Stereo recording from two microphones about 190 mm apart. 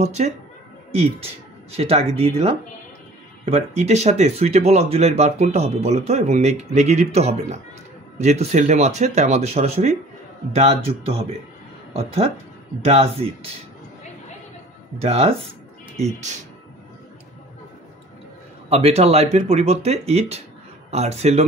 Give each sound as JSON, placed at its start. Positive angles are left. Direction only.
{"t": 0.0, "sound": "speech", "side_deg": -35}
{"t": 15.0, "sound": "speech", "side_deg": -30}
{"t": 18.7, "sound": "speech", "side_deg": -30}